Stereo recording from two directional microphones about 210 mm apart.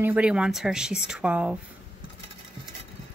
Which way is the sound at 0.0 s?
5° right (ahead or behind).